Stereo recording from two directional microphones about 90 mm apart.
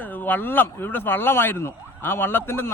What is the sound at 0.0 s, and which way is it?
Speech, 20° left (ahead or behind).